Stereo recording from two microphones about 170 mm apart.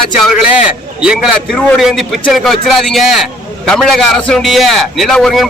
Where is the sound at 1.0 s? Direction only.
5° right (ahead or behind).